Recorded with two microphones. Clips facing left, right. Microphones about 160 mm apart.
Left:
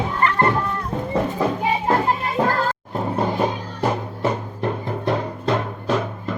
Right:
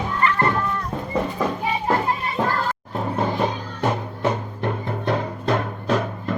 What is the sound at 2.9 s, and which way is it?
Music, centre (ahead or behind).